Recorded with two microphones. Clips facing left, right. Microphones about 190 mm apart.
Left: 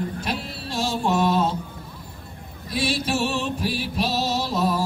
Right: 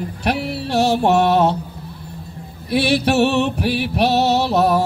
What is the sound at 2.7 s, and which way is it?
Music, 70° right (ahead or behind).